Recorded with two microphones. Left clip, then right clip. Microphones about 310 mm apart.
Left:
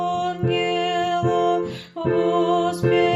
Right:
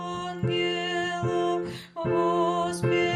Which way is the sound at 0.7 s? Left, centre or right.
Right.